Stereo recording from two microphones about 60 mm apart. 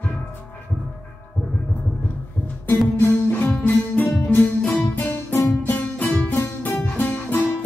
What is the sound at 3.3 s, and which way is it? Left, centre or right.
Music, left.